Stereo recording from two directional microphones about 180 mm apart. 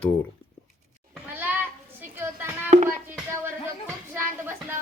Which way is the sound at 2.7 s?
40° right (ahead or behind).